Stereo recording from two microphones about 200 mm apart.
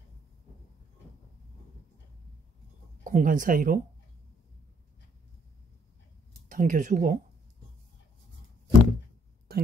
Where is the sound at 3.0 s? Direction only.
40° right (ahead or behind).